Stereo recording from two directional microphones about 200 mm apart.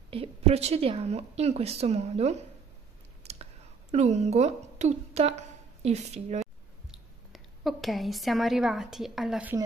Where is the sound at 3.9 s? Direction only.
35° right (ahead or behind).